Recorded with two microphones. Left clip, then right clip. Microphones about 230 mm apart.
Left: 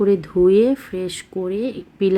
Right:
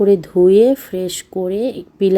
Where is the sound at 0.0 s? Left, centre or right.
Centre.